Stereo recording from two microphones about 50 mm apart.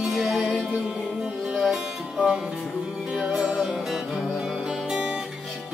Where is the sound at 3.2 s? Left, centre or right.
Right.